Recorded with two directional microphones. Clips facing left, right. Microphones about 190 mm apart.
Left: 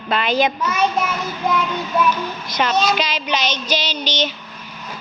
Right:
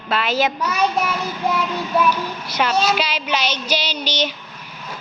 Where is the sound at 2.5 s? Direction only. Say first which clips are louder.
Even; 10° right (ahead or behind).